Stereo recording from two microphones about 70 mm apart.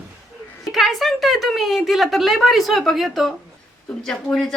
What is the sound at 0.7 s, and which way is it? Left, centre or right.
A woman's voice, centre.